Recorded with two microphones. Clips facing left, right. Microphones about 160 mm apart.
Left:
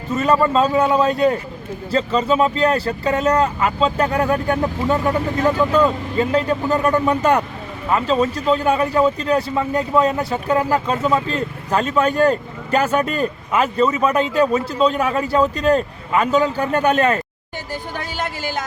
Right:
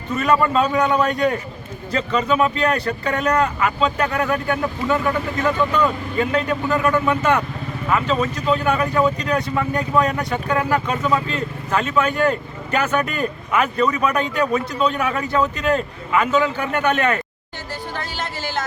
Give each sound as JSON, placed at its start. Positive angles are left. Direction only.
{"t": 0.1, "sound": "speech", "side_deg": 25}